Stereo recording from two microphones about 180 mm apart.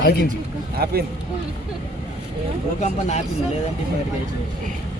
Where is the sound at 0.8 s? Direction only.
60° right (ahead or behind).